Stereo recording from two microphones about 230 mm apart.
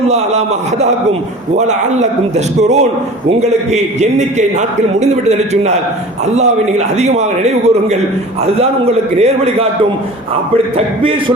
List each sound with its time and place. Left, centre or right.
0.1 s a man's voice: right
6.3 s a man's voice: right